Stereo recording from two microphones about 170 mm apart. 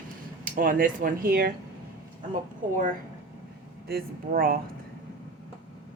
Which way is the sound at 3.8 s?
60° right (ahead or behind).